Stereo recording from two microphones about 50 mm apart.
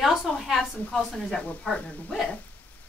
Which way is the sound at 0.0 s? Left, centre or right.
Centre.